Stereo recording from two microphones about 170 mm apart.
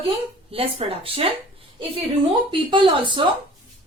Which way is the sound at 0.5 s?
35° right (ahead or behind).